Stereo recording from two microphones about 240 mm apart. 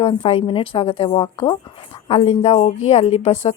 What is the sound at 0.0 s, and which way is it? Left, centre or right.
A woman's voice, left.